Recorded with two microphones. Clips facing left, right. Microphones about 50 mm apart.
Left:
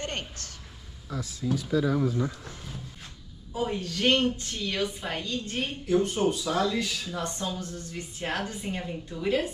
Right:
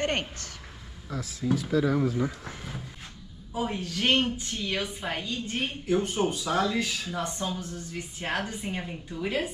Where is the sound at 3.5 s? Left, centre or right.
Centre.